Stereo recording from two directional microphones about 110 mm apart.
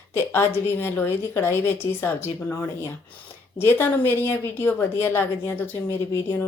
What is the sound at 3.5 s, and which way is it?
A woman's voice, 20° left (ahead or behind).